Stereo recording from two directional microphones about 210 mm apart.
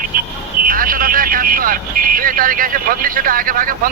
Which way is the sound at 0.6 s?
40° right (ahead or behind).